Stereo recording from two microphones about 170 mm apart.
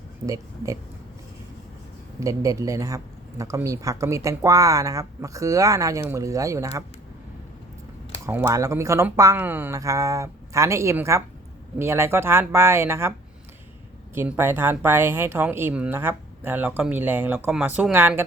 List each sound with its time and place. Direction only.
0.3 s speech: 20° right (ahead or behind)
2.2 s speech: 20° right (ahead or behind)
8.3 s speech: 15° right (ahead or behind)
14.2 s speech: 15° right (ahead or behind)